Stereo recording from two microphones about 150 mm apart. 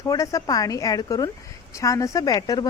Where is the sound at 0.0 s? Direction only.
25° left (ahead or behind).